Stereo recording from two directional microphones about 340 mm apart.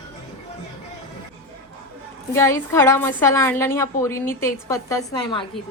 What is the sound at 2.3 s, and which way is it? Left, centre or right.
A woman's voice, centre.